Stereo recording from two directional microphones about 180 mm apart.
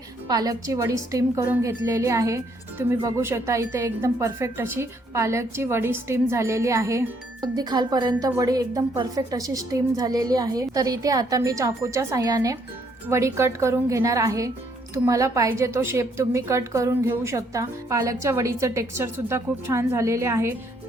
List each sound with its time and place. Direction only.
0.3 s a woman's voice: 20° right (ahead or behind)